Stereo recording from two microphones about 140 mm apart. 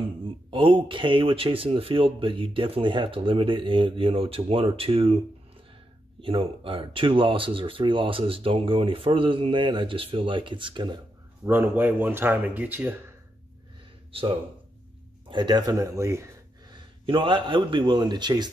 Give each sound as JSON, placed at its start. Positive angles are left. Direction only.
{"t": 0.0, "sound": "speech", "side_deg": -40}
{"t": 6.2, "sound": "speech", "side_deg": -40}
{"t": 11.4, "sound": "speech", "side_deg": -15}
{"t": 15.2, "sound": "speech", "side_deg": -35}
{"t": 17.0, "sound": "speech", "side_deg": -35}